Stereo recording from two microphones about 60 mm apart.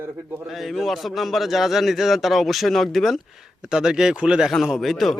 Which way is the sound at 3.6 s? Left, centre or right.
Centre.